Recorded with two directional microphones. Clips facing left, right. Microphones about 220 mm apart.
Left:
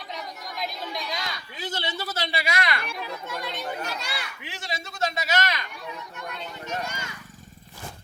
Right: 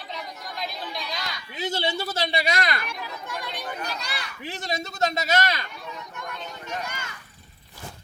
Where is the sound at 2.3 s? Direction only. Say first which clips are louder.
Right 1 dB; 30° right (ahead or behind).